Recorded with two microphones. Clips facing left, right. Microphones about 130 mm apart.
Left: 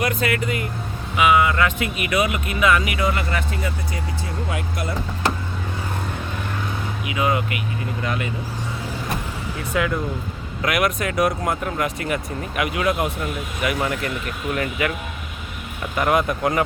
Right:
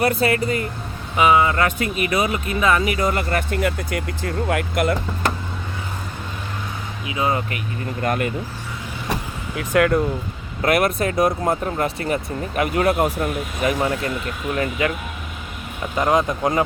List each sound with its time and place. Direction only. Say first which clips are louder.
0.0 s speech: right 3 dB; 35° right (ahead or behind); by 4.9 s 60° right (ahead or behind)
7.1 s speech: even; 30° right (ahead or behind)
8.0 s speech: right 6 dB; 50° right (ahead or behind)
9.6 s speech: right 6 dB; 60° right (ahead or behind)
10.6 s speech: right 3 dB; 35° right (ahead or behind)
16.0 s speech: right 1 dB; 25° right (ahead or behind)